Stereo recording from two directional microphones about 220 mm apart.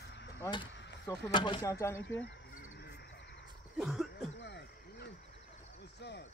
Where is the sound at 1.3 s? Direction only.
20° left (ahead or behind).